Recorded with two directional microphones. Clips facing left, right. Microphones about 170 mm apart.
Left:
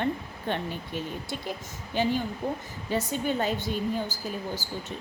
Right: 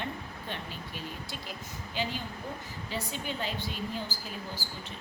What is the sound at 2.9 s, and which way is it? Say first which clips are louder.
Speech: left 9 dB; 50° left (ahead or behind).